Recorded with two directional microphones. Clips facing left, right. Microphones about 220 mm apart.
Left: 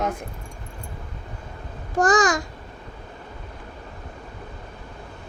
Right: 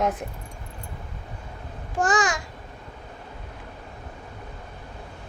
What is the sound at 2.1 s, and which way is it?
Speech, 40° left (ahead or behind).